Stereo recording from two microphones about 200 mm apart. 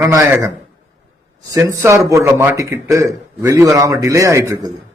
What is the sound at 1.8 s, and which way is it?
A man's voice, 15° right (ahead or behind).